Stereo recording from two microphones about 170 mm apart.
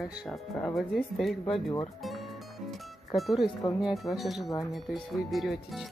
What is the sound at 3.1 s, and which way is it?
Speech, centre (ahead or behind).